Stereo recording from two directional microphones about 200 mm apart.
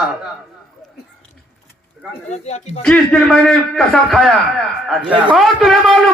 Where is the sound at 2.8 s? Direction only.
5° left (ahead or behind).